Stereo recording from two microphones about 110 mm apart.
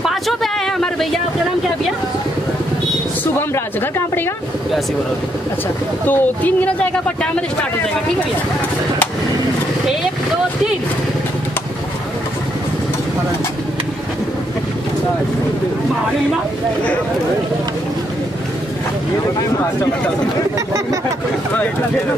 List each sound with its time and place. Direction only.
0.0 s a sound: centre (ahead or behind)
6.0 s speech: 15° left (ahead or behind)
20.5 s speech: 30° right (ahead or behind)